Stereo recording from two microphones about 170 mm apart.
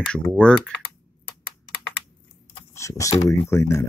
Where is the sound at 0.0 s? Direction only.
5° left (ahead or behind).